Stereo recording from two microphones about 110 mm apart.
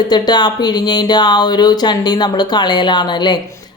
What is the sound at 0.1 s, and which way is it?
Speech, 40° left (ahead or behind).